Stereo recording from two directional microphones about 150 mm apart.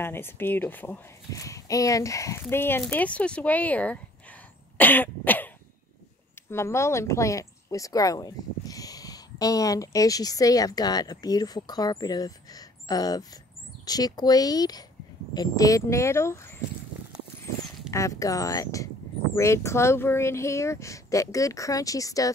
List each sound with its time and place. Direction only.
0.0 s speech: 15° left (ahead or behind)
6.5 s speech: 20° left (ahead or behind)
17.9 s speech: 20° left (ahead or behind)